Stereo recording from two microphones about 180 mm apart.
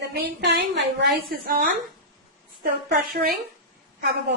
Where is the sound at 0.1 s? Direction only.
70° right (ahead or behind).